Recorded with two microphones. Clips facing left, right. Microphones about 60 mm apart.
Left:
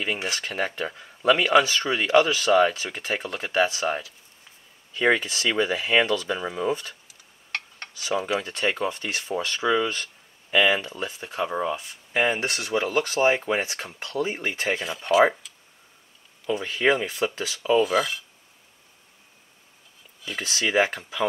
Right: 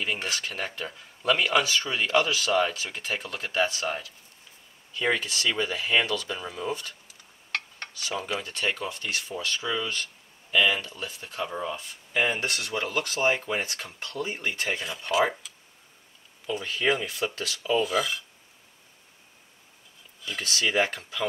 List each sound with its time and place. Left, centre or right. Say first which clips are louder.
0.0 s speech: left 2 dB; centre
0.7 s speech: left 5 dB; left
4.9 s speech: left 5 dB; left
8.1 s speech: left 6 dB; centre
8.4 s speech: left 4 dB; left
9.3 s speech: left 9 dB; left
12.1 s speech: left 3 dB; left; by 13.1 s centre
13.1 s speech: left 4 dB; left
14.7 s speech: left 8 dB; centre
15.4 s a sound: even; centre
17.0 s speech: left 4 dB; centre
17.7 s speech: left 4 dB; centre
20.2 s speech: left 1 dB; centre